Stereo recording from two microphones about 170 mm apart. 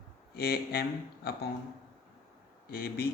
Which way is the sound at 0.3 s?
60° left (ahead or behind).